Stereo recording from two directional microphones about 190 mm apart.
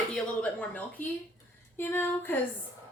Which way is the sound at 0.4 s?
5° left (ahead or behind).